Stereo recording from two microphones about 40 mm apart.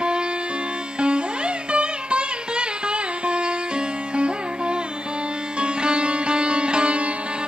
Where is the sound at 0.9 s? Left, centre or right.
Right.